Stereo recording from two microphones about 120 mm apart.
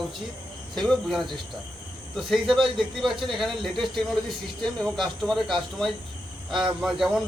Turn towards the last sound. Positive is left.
turn(degrees=-5)  # may be behind; listen again after turning